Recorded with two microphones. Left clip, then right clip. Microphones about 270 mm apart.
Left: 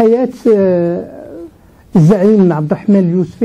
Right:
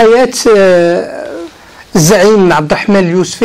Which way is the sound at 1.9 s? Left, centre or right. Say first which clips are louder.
Right 3 dB; right.